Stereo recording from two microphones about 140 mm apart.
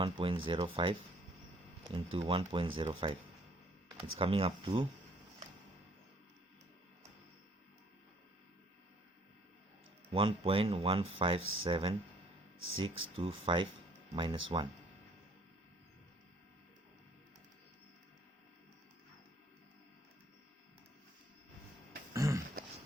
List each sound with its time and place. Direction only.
0.0 s speech: 40° right (ahead or behind)
4.2 s speech: 40° right (ahead or behind)
10.1 s speech: 40° right (ahead or behind)
22.1 s a sound: 25° right (ahead or behind)